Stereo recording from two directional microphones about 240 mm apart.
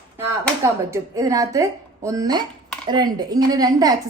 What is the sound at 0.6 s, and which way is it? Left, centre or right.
A woman's voice, centre.